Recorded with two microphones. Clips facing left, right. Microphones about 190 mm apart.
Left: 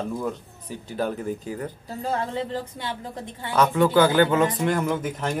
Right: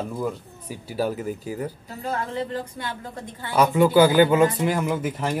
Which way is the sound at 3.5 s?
10° right (ahead or behind).